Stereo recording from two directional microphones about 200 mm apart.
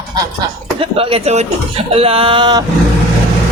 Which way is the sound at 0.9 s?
30° right (ahead or behind).